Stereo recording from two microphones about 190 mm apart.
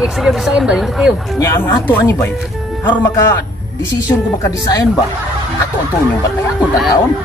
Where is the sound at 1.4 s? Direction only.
15° left (ahead or behind).